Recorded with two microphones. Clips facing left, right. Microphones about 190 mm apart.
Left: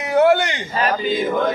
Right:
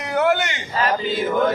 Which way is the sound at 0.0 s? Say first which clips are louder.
Left 5 dB; 25° left (ahead or behind).